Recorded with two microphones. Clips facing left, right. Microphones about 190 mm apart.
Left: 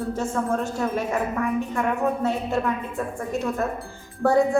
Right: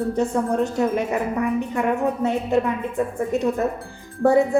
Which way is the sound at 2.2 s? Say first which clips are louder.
Right 4 dB; 20° right (ahead or behind).